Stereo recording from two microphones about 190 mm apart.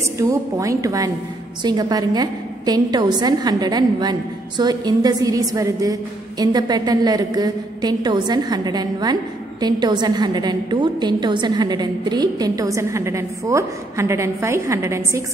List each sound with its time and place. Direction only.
0.2 s a woman's voice: 15° right (ahead or behind)